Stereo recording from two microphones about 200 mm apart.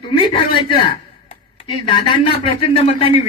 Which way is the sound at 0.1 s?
25° left (ahead or behind).